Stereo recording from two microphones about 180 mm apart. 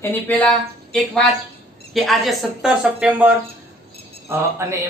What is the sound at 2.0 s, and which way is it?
A woman's voice, centre (ahead or behind).